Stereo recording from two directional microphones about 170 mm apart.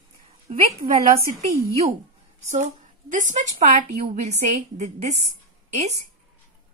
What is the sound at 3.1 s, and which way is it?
A woman's voice, 50° right (ahead or behind).